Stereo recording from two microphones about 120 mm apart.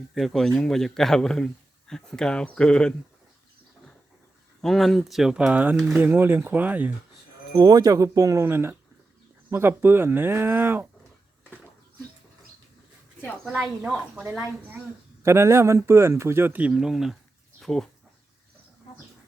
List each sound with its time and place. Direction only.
0.1 s a man's voice: centre (ahead or behind)
4.6 s a man's voice: 5° left (ahead or behind)
5.5 s speech: 15° right (ahead or behind)
7.5 s a man's voice: 35° right (ahead or behind); by 10.8 s 15° right (ahead or behind)
13.5 s speech: 5° right (ahead or behind)
15.2 s a man's voice: 25° right (ahead or behind); by 17.8 s 5° left (ahead or behind)